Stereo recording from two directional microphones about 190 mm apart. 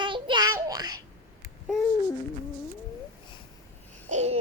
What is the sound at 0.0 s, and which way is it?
Child singing, 25° right (ahead or behind).